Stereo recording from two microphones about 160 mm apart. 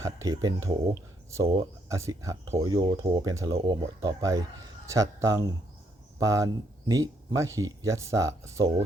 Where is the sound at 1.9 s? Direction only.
20° right (ahead or behind).